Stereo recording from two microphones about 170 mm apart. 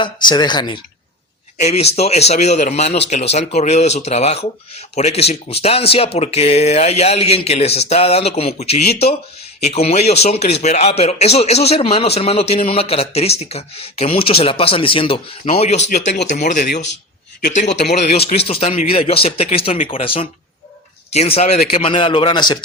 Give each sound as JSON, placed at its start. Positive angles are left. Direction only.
{"t": 0.0, "sound": "a man's voice", "side_deg": 25}
{"t": 1.5, "sound": "a man's voice", "side_deg": 40}
{"t": 17.5, "sound": "a man's voice", "side_deg": 45}